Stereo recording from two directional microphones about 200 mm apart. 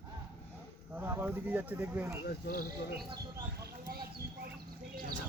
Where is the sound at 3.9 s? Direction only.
50° right (ahead or behind).